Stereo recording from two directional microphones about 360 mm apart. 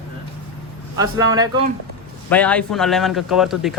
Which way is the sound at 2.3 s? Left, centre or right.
Centre.